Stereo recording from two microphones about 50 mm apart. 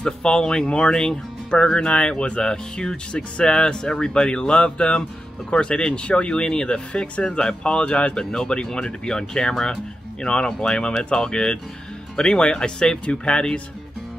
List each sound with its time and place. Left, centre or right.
0.0 s speech: centre